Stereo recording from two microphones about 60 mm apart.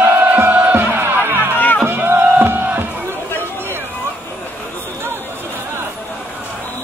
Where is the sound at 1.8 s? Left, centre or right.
Right.